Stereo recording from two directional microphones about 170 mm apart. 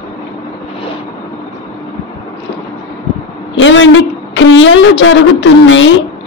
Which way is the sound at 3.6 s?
90° left.